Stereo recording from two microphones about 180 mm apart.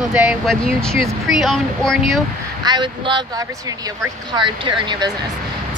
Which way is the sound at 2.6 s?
25° right (ahead or behind).